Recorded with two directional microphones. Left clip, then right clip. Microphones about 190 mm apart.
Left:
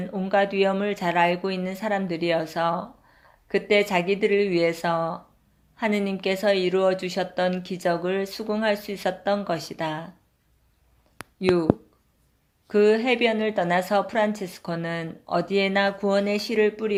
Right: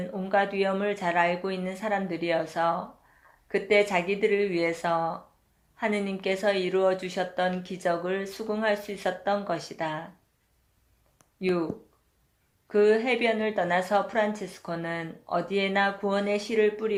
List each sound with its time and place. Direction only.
0.0 s speech: 40° left (ahead or behind)
11.3 s speech: 40° left (ahead or behind)
12.6 s speech: 45° left (ahead or behind)